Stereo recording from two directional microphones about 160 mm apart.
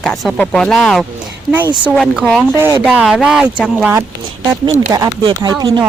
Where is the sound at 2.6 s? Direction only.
20° right (ahead or behind).